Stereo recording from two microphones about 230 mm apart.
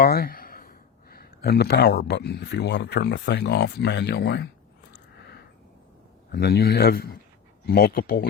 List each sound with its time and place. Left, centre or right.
0.0 s speech: left
6.3 s speech: left